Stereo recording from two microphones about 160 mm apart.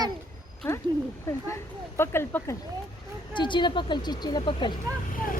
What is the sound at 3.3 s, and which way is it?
A woman's voice, 30° left (ahead or behind).